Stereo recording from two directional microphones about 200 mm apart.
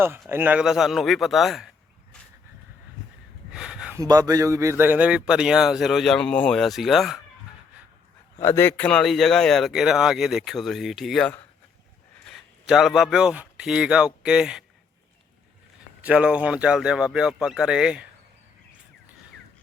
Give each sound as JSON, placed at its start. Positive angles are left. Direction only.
{"t": 0.3, "sound": "speech", "side_deg": -10}
{"t": 3.5, "sound": "a sound", "side_deg": -5}
{"t": 3.9, "sound": "speech", "side_deg": -15}
{"t": 8.4, "sound": "a man's voice", "side_deg": 15}
{"t": 16.0, "sound": "speech", "side_deg": -5}